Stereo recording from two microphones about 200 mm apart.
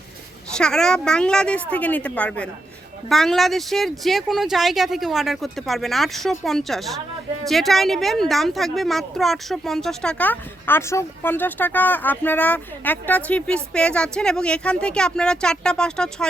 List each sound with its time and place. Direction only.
0.5 s a woman's voice: 5° left (ahead or behind)